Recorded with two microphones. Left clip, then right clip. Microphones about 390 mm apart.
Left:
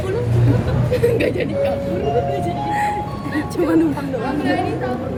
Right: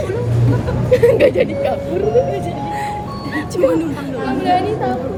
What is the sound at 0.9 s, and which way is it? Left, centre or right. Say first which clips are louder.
Speech: right 7 dB; centre.